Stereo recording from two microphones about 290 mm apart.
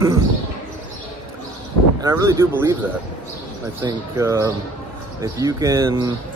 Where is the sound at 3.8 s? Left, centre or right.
Centre.